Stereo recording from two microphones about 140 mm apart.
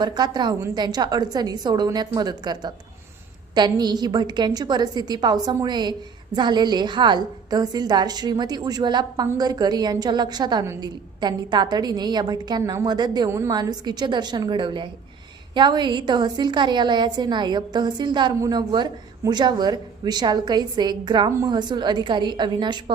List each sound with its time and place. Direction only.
0.0 s a woman's voice: 30° right (ahead or behind)